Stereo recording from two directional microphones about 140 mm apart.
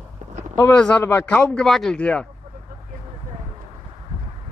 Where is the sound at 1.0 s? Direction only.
15° left (ahead or behind).